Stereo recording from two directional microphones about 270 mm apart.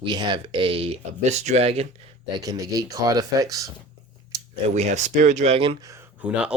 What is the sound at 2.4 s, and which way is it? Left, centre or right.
Speech, centre.